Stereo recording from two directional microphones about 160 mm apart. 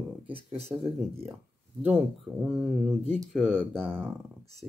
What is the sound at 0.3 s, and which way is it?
Speech, 40° right (ahead or behind).